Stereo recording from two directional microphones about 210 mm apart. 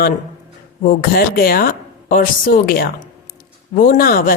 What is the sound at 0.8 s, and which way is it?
Speech, 45° left (ahead or behind).